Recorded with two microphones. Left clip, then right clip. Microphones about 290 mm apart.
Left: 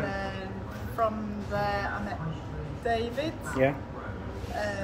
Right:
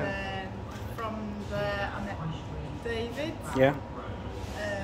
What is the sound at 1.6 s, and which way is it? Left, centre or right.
Speech, centre.